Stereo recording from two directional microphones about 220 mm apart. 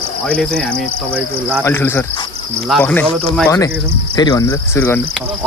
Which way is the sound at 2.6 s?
5° left (ahead or behind).